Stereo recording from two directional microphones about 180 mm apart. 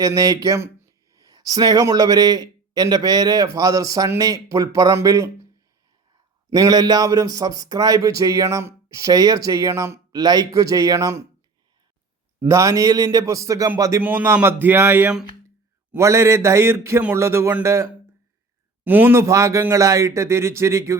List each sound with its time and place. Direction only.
0.0 s speech: 20° right (ahead or behind)
6.5 s speech: 20° right (ahead or behind)
12.4 s a man's voice: 15° right (ahead or behind)
18.9 s a man's voice: 10° right (ahead or behind)